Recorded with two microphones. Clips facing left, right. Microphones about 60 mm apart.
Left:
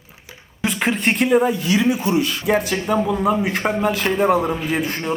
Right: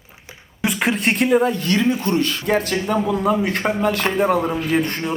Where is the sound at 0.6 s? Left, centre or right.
Centre.